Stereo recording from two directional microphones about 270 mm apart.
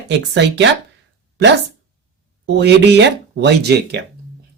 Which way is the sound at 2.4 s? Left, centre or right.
Right.